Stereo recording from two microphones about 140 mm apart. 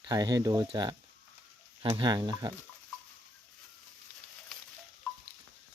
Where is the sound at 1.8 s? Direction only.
35° right (ahead or behind).